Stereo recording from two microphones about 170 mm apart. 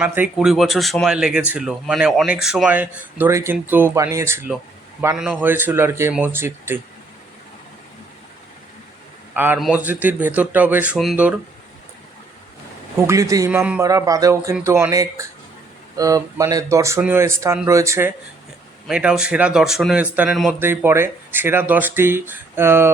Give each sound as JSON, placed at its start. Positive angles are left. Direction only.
{"t": 0.0, "sound": "speech", "side_deg": -10}
{"t": 9.3, "sound": "a man's voice", "side_deg": -10}
{"t": 13.0, "sound": "speech", "side_deg": -15}
{"t": 18.9, "sound": "speech", "side_deg": -5}
{"t": 20.6, "sound": "speech", "side_deg": -15}